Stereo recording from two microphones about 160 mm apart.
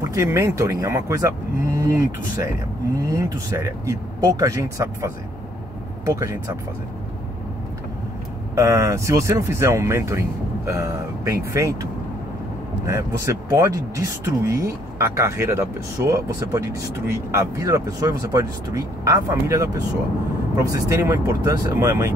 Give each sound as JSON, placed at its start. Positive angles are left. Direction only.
{"t": 0.0, "sound": "speech", "side_deg": -20}
{"t": 8.5, "sound": "speech", "side_deg": -20}
{"t": 12.8, "sound": "speech", "side_deg": -20}